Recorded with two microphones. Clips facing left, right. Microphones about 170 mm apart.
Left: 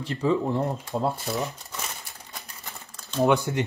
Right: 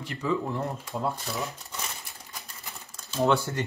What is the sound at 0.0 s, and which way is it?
Speech, 35° left (ahead or behind).